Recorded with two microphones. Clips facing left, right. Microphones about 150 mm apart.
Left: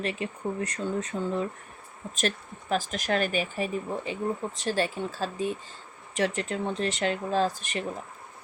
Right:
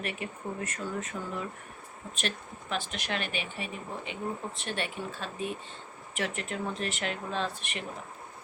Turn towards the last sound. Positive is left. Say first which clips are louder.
# left 7 dB
turn(degrees=35)  # may be behind; listen again after turning